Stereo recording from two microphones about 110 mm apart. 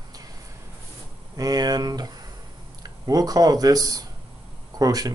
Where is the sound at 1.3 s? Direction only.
35° right (ahead or behind).